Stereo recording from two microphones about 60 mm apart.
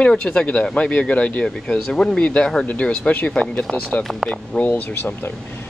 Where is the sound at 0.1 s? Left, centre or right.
Centre.